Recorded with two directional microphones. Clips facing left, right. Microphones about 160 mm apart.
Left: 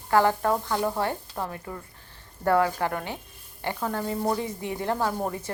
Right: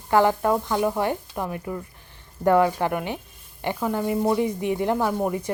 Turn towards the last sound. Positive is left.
turn(degrees=-15)  # may be behind; listen again after turning